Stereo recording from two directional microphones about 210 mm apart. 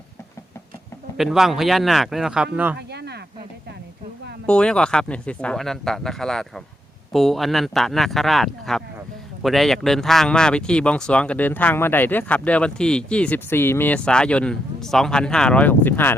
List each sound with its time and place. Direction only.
1.1 s speech: centre (ahead or behind)
2.7 s a sound: 50° right (ahead or behind)
4.4 s speech: 5° left (ahead or behind)